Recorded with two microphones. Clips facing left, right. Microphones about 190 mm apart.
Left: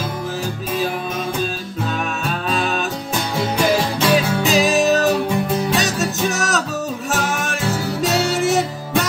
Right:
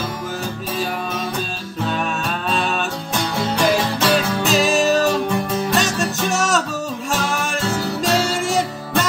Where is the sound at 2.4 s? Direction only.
Centre (ahead or behind).